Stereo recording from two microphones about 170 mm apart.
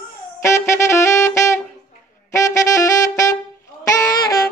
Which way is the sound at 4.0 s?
20° left (ahead or behind).